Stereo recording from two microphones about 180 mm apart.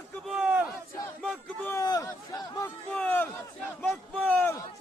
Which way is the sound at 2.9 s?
10° left (ahead or behind).